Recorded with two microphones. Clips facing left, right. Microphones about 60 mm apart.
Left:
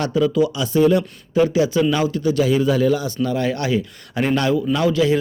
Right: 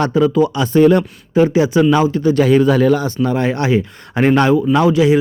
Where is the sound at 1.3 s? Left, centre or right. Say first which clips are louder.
Right 4 dB; right.